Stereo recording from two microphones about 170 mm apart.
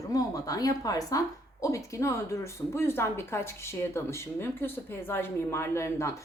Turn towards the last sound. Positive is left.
turn(degrees=15)  # may be behind; listen again after turning